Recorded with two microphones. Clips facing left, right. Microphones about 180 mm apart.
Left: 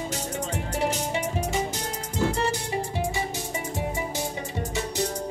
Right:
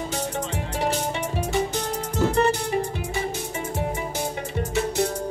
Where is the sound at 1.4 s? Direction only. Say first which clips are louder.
Right 3 dB; 60° right (ahead or behind).